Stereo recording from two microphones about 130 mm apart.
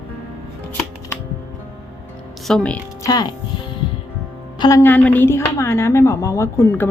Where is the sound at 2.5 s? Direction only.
5° left (ahead or behind).